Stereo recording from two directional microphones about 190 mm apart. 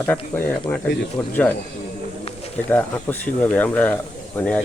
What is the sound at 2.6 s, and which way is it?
Speech, 10° left (ahead or behind).